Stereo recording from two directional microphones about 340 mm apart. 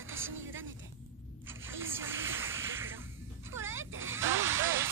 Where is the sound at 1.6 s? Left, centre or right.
Right.